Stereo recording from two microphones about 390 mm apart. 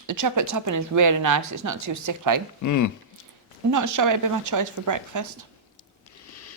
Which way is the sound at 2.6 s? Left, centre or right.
Left.